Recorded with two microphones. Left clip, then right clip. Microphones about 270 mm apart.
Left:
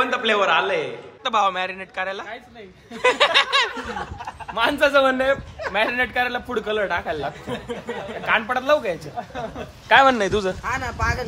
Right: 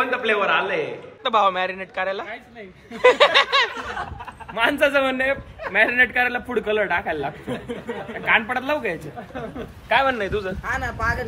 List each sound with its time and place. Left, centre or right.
0.0 s a man's voice: centre
10.0 s a man's voice: centre